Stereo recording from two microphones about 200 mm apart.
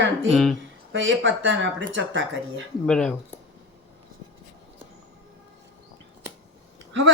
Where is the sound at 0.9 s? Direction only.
70° right (ahead or behind).